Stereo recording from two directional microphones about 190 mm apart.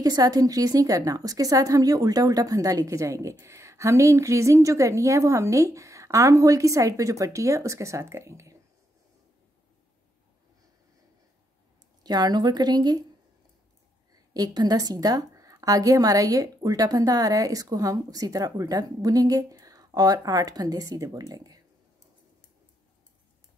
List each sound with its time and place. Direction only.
0.0 s a woman's voice: 20° right (ahead or behind)
12.0 s a woman's voice: 20° right (ahead or behind)
14.3 s a woman's voice: 20° right (ahead or behind)